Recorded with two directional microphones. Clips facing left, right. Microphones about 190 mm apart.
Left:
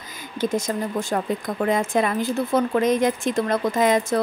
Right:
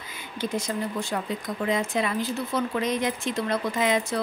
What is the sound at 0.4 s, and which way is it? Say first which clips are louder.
Speech: left 5 dB; 45° left (ahead or behind).